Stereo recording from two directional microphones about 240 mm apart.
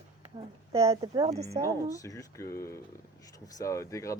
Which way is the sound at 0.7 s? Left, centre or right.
Centre.